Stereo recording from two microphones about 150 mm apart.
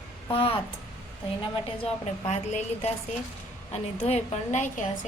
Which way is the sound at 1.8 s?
50° left (ahead or behind).